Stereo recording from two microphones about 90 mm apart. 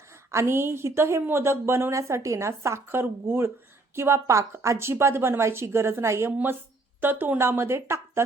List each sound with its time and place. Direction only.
0.3 s speech: 30° right (ahead or behind)